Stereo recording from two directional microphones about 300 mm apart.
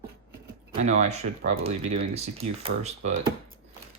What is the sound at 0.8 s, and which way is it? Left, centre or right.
Speech, right.